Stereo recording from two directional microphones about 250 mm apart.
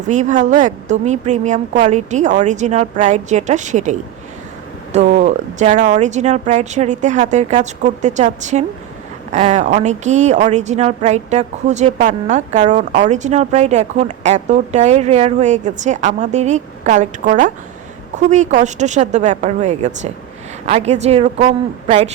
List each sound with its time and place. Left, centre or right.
0.1 s speech: right